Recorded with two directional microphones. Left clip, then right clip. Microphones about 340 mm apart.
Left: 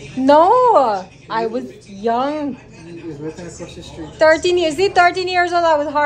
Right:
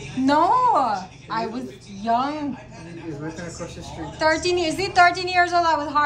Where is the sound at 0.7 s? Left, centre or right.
Centre.